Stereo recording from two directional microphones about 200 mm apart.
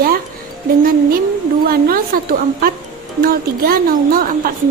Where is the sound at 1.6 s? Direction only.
50° right (ahead or behind).